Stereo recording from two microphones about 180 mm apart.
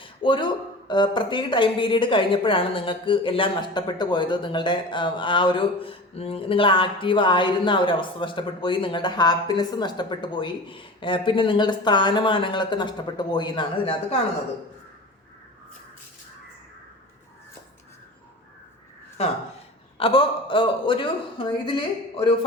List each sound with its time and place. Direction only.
0.0 s speech: 30° left (ahead or behind)
20.0 s speech: 30° left (ahead or behind)